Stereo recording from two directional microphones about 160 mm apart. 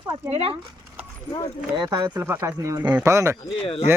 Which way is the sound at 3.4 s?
35° left (ahead or behind).